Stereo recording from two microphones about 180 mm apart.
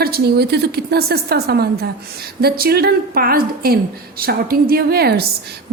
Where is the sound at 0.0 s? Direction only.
60° right (ahead or behind).